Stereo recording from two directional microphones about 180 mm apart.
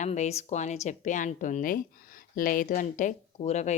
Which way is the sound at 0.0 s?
40° left (ahead or behind).